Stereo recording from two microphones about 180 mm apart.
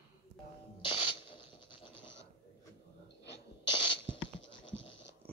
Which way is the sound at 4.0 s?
90° left.